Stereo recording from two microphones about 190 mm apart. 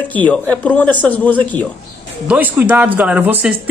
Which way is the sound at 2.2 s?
10° right (ahead or behind).